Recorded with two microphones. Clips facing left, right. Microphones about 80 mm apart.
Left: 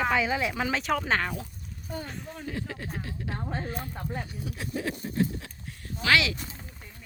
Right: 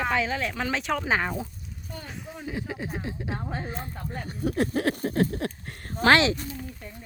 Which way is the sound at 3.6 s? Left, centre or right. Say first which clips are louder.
Even; right.